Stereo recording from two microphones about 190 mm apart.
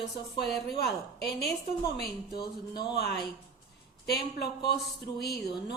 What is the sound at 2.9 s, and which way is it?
Speech, 55° left (ahead or behind).